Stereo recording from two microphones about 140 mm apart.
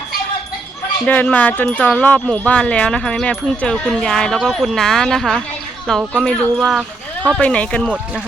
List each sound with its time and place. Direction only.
1.0 s speech: 10° left (ahead or behind)